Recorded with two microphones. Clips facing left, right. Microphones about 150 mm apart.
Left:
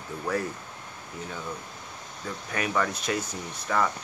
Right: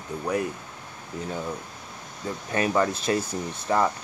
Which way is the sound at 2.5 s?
30° right (ahead or behind).